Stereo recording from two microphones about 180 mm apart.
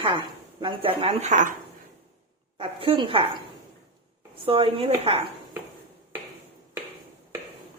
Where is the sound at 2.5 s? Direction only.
30° right (ahead or behind).